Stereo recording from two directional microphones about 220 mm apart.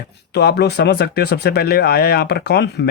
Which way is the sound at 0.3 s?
50° left (ahead or behind).